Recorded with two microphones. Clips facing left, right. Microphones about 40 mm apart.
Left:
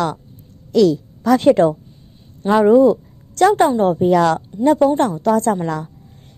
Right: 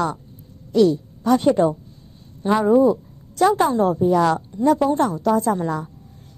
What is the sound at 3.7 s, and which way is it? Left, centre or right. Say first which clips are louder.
Speech: left 3 dB; left.